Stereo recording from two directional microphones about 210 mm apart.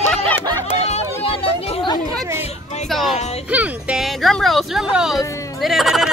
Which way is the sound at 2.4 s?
30° left (ahead or behind).